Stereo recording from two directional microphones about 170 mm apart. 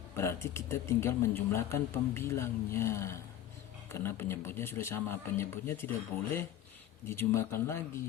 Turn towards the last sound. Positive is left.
turn(degrees=15)  # may be behind; listen again after turning